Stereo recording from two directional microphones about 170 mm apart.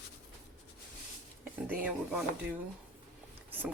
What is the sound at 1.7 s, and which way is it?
Speech, 10° right (ahead or behind).